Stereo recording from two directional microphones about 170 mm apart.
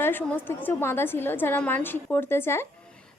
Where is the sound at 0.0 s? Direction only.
10° left (ahead or behind).